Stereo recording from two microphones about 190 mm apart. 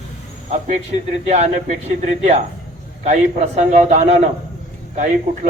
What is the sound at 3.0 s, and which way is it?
A man's voice, 35° right (ahead or behind).